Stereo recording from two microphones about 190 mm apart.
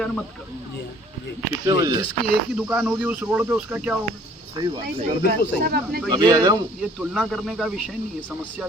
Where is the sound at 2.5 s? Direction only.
5° right (ahead or behind).